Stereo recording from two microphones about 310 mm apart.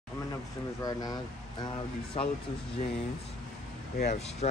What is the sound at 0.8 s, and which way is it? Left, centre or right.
Speech, centre.